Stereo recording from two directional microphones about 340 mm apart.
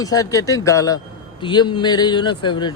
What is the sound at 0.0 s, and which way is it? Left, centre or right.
Speech, centre.